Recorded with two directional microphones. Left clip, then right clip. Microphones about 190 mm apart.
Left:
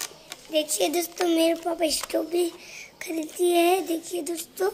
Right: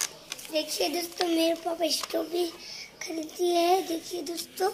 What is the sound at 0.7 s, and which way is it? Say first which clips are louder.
A woman's voice: left 4 dB; 50° left (ahead or behind).